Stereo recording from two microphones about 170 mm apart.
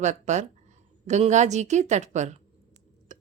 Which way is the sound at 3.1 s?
45° right (ahead or behind).